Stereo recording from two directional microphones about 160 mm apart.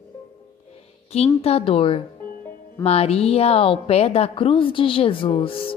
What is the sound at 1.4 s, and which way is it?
Music, 35° left (ahead or behind).